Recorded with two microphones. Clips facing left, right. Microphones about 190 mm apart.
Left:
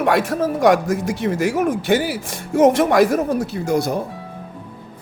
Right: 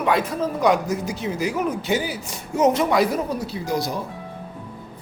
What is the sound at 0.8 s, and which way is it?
Speech, 50° left (ahead or behind).